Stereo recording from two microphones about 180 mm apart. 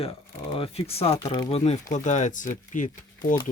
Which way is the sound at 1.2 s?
20° left (ahead or behind).